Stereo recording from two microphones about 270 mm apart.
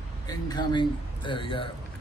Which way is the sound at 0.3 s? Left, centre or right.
Centre.